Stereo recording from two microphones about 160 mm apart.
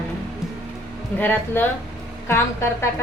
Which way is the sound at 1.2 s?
10° left (ahead or behind).